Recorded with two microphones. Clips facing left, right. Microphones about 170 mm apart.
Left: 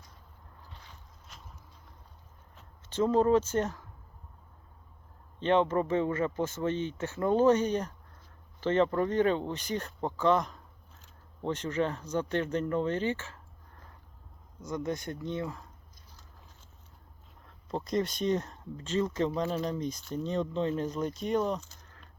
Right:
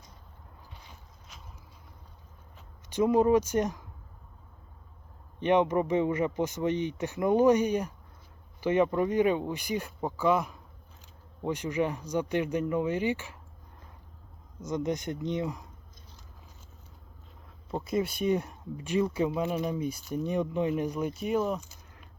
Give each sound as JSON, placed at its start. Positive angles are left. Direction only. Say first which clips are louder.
{"t": 0.7, "sound": "vehicle", "louder": "right 1 dB", "side_deg": -15}
{"t": 1.3, "sound": "boat", "louder": "even", "side_deg": 0}
{"t": 2.9, "sound": "speech", "louder": "right 2 dB", "side_deg": -15}
{"t": 5.4, "sound": "speech", "louder": "right 1 dB", "side_deg": -15}
{"t": 14.6, "sound": "speech", "louder": "right 3 dB", "side_deg": -20}
{"t": 17.7, "sound": "speech", "louder": "right 1 dB", "side_deg": -5}